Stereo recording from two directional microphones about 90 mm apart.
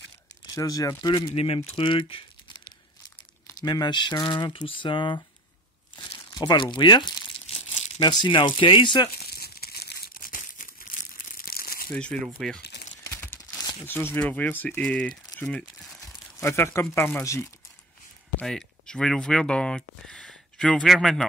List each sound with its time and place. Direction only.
0.6 s speech: 40° left (ahead or behind)
1.1 s speech: 80° left
3.4 s speech: 45° left (ahead or behind)
6.3 s speech: 55° left (ahead or behind)
11.9 s speech: 15° left (ahead or behind)
13.8 s speech: 25° left (ahead or behind)
16.3 s speech: 30° left (ahead or behind)
18.4 s speech: 5° left (ahead or behind)